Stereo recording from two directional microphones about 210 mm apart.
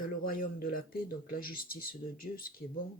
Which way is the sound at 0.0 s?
45° left (ahead or behind).